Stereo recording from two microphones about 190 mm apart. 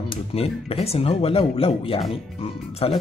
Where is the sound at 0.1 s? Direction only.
30° left (ahead or behind).